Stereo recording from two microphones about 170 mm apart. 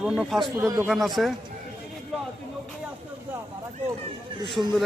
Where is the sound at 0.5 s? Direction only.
15° right (ahead or behind).